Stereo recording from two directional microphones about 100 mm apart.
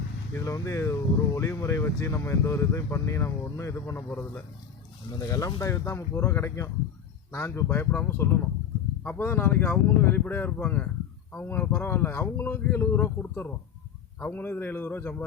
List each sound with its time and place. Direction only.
0.3 s speech: 30° left (ahead or behind)
5.1 s speech: 35° left (ahead or behind)